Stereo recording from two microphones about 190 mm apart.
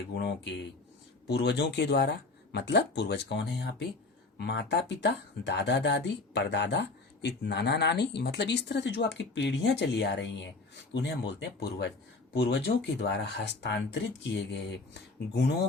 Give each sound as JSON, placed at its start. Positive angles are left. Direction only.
{"t": 0.1, "sound": "speech", "side_deg": 60}